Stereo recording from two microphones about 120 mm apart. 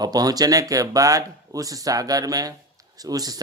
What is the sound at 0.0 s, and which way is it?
Speech, 30° right (ahead or behind).